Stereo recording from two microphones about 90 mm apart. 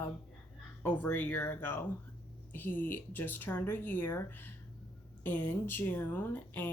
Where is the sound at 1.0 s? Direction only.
20° left (ahead or behind).